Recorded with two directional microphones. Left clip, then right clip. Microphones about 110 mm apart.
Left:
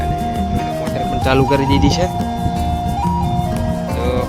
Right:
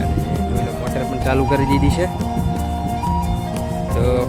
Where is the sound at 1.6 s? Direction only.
15° left (ahead or behind).